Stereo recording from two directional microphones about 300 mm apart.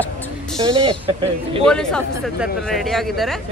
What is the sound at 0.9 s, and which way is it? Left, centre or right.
Speech, centre.